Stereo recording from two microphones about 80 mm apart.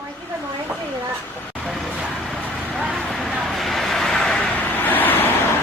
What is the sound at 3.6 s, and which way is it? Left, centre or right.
Vehicle, centre.